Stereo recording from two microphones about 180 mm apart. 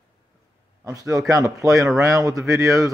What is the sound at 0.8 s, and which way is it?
Speech, 20° right (ahead or behind).